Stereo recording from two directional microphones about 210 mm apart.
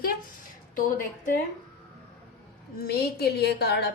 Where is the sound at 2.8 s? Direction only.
50° left (ahead or behind).